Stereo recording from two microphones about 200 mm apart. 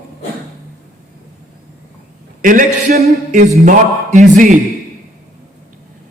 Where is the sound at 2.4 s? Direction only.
40° right (ahead or behind).